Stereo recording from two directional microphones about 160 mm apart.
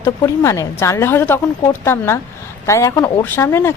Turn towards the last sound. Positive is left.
turn(degrees=15)  # may be behind; listen again after turning